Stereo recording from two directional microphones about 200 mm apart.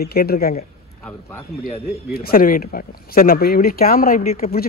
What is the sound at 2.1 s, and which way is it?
Speech, 45° left (ahead or behind).